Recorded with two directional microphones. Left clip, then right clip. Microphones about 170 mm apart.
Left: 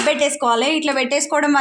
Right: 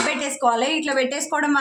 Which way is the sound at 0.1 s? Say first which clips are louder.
Left 4 dB; 35° left (ahead or behind).